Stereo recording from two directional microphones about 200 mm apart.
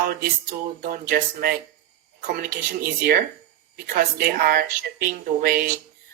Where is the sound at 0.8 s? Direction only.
45° right (ahead or behind).